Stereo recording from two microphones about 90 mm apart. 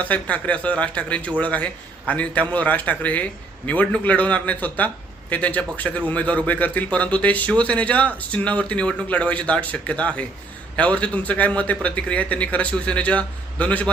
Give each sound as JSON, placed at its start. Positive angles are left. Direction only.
{"t": 0.0, "sound": "speech", "side_deg": 15}